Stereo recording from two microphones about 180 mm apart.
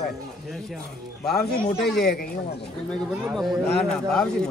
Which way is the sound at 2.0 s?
55° left (ahead or behind).